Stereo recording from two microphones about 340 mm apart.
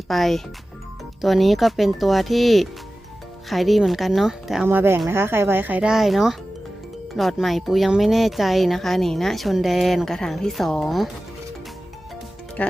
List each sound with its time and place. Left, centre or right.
0.1 s speech: centre
12.6 s speech: centre